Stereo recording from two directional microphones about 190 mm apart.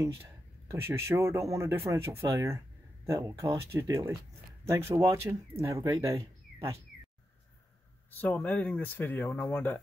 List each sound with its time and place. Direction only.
0.7 s speech: 15° right (ahead or behind)
8.2 s speech: 10° left (ahead or behind)